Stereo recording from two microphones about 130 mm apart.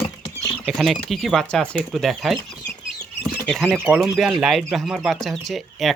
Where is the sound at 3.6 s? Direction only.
10° right (ahead or behind).